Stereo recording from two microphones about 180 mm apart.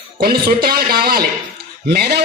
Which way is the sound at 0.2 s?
55° right (ahead or behind).